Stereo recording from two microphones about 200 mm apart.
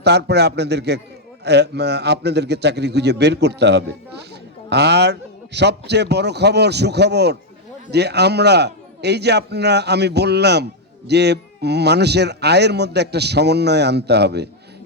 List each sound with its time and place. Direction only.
0.0 s speech: 55° right (ahead or behind)